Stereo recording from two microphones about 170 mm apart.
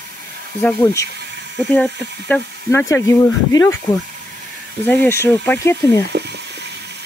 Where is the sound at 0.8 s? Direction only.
20° left (ahead or behind).